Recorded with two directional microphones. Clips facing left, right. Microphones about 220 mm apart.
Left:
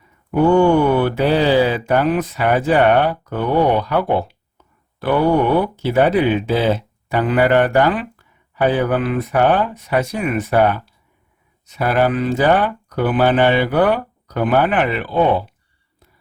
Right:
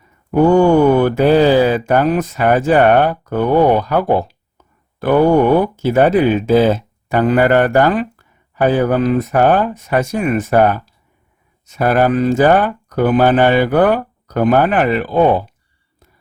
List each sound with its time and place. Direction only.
0.3 s speech: 40° right (ahead or behind)